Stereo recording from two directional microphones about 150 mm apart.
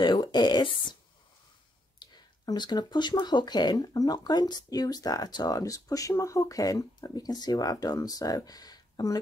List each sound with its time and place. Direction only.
0.0 s speech: 30° left (ahead or behind)
2.0 s speech: 30° left (ahead or behind)